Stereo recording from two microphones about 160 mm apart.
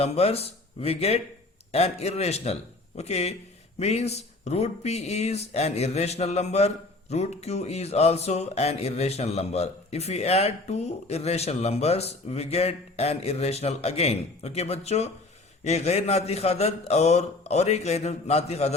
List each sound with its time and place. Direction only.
0.0 s speech: 40° left (ahead or behind)